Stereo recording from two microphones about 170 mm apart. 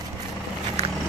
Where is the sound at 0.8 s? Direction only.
40° right (ahead or behind).